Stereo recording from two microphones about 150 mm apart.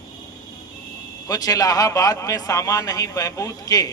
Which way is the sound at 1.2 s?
25° left (ahead or behind).